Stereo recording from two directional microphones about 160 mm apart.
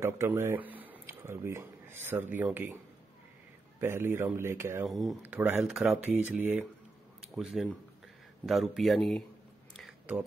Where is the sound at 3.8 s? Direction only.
15° right (ahead or behind).